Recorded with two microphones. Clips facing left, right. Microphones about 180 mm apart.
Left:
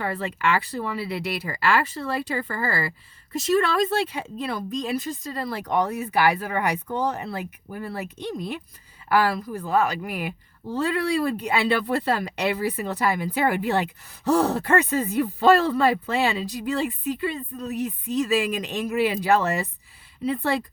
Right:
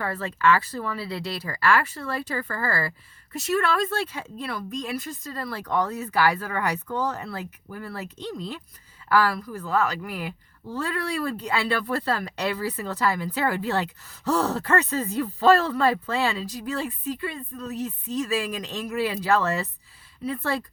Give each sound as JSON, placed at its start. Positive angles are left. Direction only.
{"t": 0.0, "sound": "speech", "side_deg": 15}